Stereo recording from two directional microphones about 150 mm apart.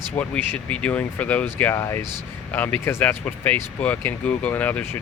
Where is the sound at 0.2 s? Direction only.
10° left (ahead or behind).